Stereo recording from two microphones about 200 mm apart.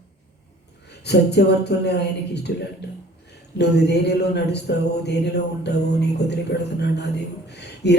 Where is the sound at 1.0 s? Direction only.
55° left (ahead or behind).